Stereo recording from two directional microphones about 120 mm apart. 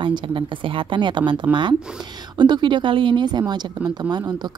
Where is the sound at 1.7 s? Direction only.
5° right (ahead or behind).